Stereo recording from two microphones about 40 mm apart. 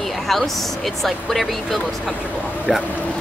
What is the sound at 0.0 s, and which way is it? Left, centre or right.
Speech, centre.